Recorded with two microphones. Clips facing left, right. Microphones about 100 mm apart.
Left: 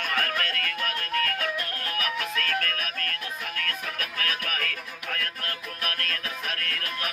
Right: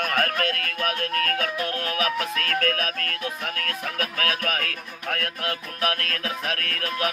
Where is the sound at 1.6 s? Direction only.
90° right.